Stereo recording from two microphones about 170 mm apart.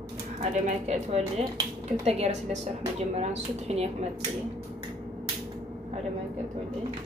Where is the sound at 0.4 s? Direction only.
40° right (ahead or behind).